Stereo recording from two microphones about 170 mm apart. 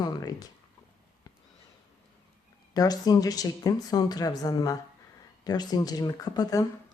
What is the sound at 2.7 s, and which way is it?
Speech, 20° left (ahead or behind).